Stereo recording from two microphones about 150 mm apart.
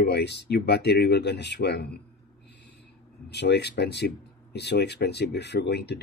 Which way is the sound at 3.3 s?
90° left.